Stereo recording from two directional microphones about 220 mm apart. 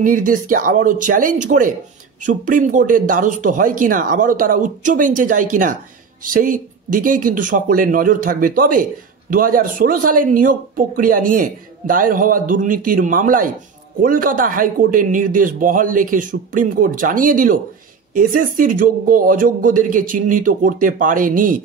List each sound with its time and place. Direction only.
0.0 s a man's voice: 35° right (ahead or behind)
18.6 s a man's voice: 40° right (ahead or behind)